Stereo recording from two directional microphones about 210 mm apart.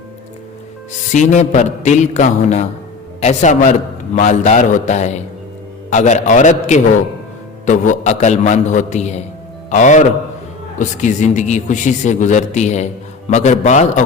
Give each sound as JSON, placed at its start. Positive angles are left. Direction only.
{"t": 1.1, "sound": "a man's voice", "side_deg": 35}